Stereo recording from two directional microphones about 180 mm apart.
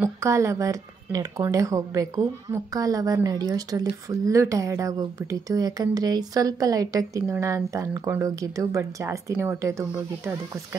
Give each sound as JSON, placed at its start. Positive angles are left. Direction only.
{"t": 0.0, "sound": "speech", "side_deg": -15}